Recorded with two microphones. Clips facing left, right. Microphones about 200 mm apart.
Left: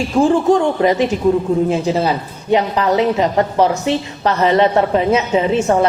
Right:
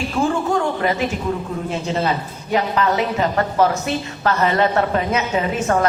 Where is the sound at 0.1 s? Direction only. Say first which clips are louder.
Left 7 dB; 30° left (ahead or behind).